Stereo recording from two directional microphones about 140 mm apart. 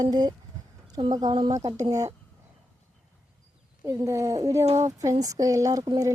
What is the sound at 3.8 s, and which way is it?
Speech, 20° right (ahead or behind).